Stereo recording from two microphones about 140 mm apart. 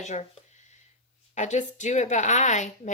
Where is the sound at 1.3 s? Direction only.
60° left (ahead or behind).